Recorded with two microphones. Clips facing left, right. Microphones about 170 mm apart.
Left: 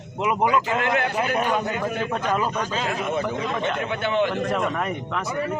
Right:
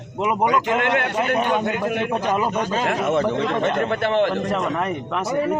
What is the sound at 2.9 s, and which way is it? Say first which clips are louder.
Speech: right 7 dB; 85° right.